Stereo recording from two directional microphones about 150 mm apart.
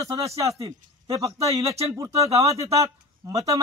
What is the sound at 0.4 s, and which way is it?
A man's voice, 20° right (ahead or behind).